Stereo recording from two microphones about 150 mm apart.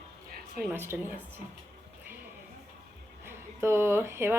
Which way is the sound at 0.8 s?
15° right (ahead or behind).